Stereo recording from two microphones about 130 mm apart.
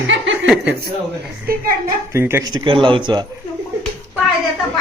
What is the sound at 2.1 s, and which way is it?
Speech, 15° right (ahead or behind).